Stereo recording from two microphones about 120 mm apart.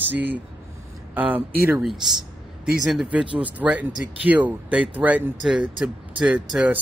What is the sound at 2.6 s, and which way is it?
A man's voice, 5° right (ahead or behind).